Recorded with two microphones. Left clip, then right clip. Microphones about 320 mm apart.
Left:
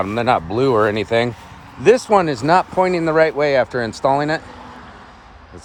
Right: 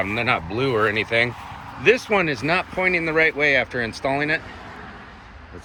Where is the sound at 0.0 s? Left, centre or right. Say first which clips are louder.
Left 5 dB; centre.